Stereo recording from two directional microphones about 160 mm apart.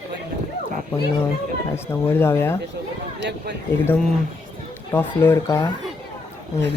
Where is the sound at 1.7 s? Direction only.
15° left (ahead or behind).